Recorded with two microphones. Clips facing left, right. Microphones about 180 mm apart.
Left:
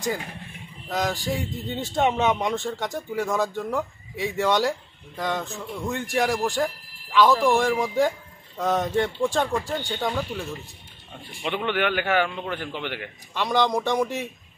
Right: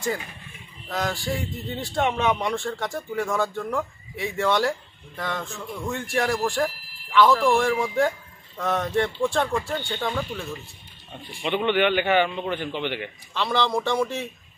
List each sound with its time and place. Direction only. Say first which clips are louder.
0.8 s speech: left 1 dB; 15° left (ahead or behind)
5.6 s a man's voice: left 1 dB; centre (ahead or behind)
6.1 s speech: left 1 dB; 15° left (ahead or behind)
6.4 s a sound: even; centre (ahead or behind)
7.3 s speech: even; 15° left (ahead or behind)
7.6 s a man's voice: even; centre (ahead or behind)
8.5 s speech: left 1 dB; 15° left (ahead or behind)
11.4 s a man's voice: right 3 dB; 5° left (ahead or behind)
13.3 s speech: left 2 dB; 15° left (ahead or behind)